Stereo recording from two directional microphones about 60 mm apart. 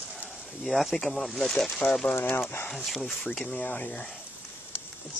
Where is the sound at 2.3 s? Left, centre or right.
Left.